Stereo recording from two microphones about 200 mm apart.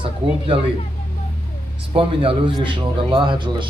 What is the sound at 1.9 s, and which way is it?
Speech, 25° right (ahead or behind).